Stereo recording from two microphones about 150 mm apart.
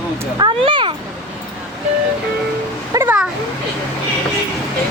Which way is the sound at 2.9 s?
10° right (ahead or behind).